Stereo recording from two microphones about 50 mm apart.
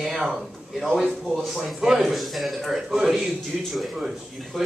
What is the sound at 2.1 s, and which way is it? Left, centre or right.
Speech, centre.